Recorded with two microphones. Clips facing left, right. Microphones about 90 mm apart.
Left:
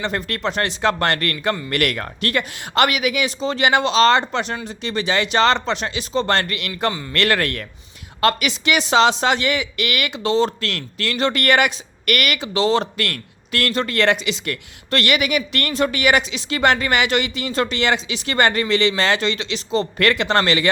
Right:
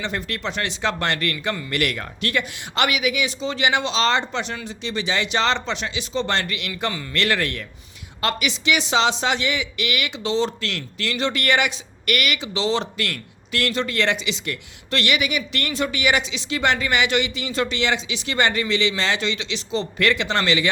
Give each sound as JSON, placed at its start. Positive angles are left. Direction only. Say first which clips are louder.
{"t": 0.0, "sound": "speech", "louder": "left 4 dB", "side_deg": 45}